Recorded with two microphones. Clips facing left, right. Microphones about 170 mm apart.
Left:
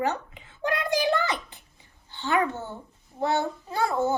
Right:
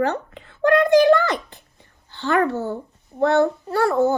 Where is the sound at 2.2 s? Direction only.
60° right (ahead or behind).